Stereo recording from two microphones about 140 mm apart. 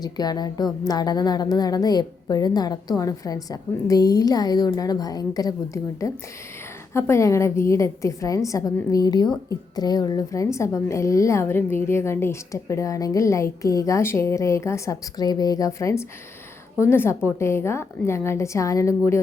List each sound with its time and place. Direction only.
0.0 s a woman's voice: 30° left (ahead or behind)